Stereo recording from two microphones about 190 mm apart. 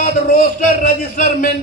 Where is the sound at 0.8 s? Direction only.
45° left (ahead or behind).